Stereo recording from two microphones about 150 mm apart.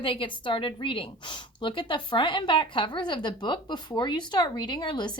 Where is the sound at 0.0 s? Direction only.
35° left (ahead or behind).